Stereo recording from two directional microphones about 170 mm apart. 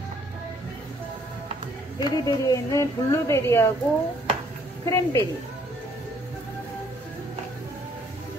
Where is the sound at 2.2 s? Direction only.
20° left (ahead or behind).